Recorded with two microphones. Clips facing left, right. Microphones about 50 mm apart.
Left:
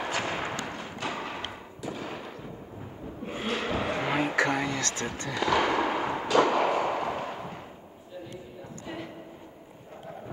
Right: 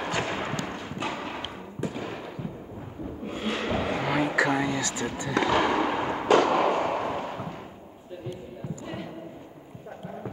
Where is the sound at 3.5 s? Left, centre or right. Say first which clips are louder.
Right 2 dB; centre.